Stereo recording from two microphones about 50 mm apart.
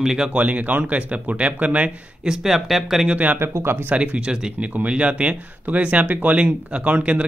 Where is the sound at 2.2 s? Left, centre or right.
Centre.